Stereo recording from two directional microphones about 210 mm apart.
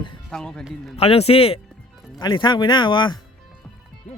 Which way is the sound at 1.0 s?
30° left (ahead or behind).